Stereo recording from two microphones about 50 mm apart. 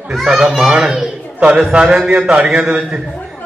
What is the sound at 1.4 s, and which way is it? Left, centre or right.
A man's voice, right.